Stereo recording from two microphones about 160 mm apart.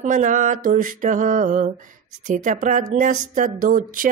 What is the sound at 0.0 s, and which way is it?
Mantra, 50° right (ahead or behind).